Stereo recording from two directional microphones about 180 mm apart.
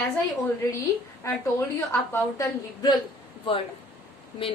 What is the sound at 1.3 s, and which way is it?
A woman's voice, 15° left (ahead or behind).